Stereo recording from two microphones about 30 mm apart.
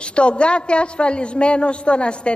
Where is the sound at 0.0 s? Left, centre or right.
Left.